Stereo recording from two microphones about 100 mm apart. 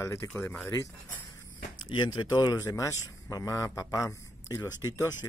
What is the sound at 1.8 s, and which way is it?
A man's voice, 50° left (ahead or behind).